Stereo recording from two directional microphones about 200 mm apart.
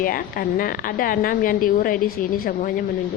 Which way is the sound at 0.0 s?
45° left (ahead or behind).